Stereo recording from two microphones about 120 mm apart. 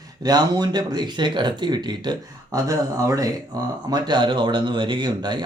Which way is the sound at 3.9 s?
40° right (ahead or behind).